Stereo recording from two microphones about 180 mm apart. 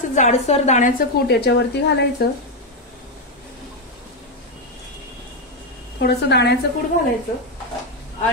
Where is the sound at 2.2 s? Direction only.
60° left (ahead or behind).